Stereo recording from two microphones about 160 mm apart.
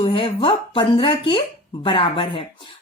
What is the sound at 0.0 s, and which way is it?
Speech, 30° left (ahead or behind).